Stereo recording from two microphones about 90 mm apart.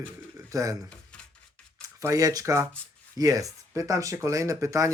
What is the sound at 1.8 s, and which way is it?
Speech, 40° right (ahead or behind).